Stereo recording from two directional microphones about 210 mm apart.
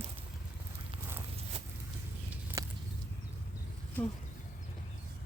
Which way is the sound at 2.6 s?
15° right (ahead or behind).